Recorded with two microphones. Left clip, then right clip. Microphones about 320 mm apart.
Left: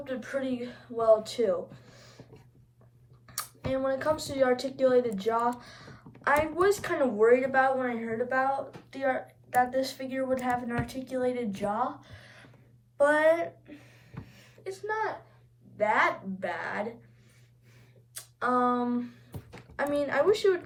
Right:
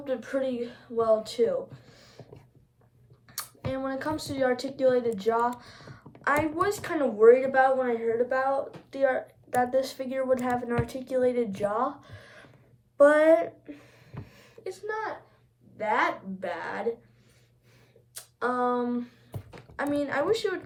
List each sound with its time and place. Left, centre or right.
0.0 s speech: centre
3.2 s a woman's voice: centre
13.0 s a sound: centre
15.8 s a woman's voice: centre
18.1 s a sound: centre
19.7 s speech: centre